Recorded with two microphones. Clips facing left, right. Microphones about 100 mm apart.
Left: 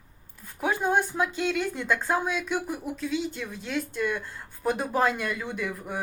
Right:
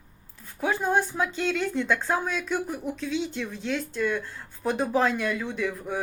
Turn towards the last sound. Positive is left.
turn(degrees=10)  # may be behind; listen again after turning